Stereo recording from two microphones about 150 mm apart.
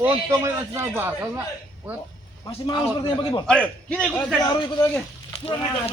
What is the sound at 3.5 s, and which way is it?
Speech, 5° left (ahead or behind).